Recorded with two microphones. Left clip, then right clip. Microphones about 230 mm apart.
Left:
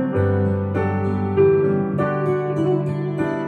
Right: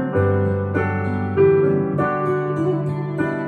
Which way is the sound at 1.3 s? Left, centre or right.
Right.